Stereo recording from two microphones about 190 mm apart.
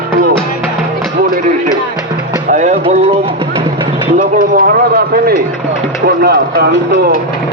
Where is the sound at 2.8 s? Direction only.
30° right (ahead or behind).